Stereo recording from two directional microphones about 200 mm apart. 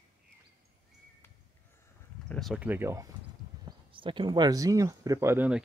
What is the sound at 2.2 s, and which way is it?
Speech, 5° left (ahead or behind).